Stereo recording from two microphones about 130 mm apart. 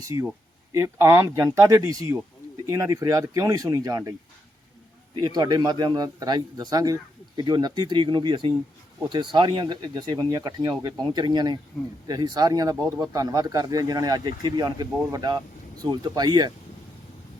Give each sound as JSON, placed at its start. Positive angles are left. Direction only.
{"t": 0.1, "sound": "speech", "side_deg": -20}
{"t": 5.1, "sound": "speech", "side_deg": -30}